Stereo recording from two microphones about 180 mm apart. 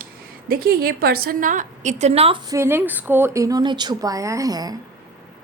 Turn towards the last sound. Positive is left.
turn(degrees=-20)  # may be behind; listen again after turning